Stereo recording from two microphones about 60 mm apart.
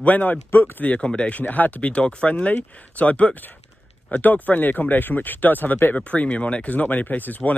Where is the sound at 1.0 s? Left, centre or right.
Centre.